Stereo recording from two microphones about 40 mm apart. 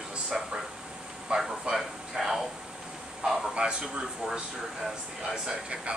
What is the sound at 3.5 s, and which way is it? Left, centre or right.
Speech, right.